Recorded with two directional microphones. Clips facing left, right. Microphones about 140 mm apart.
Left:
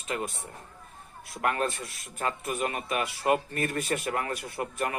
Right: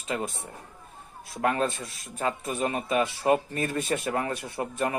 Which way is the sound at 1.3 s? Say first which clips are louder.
Right 2 dB; 25° right (ahead or behind).